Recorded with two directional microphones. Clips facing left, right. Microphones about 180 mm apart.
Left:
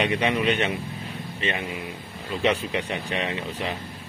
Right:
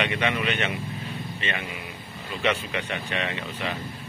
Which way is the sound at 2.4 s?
30° left (ahead or behind).